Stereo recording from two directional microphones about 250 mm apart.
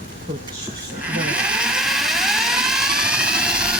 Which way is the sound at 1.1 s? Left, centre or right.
Centre.